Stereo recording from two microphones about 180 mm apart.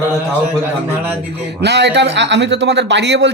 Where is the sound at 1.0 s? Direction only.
10° right (ahead or behind).